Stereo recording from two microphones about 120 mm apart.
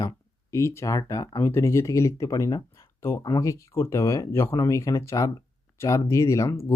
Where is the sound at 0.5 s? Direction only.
25° left (ahead or behind).